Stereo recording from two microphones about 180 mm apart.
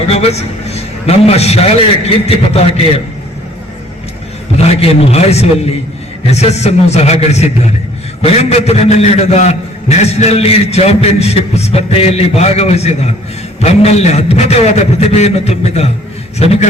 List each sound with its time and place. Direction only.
0.1 s a man's voice: 35° left (ahead or behind)
4.5 s a man's voice: 35° left (ahead or behind)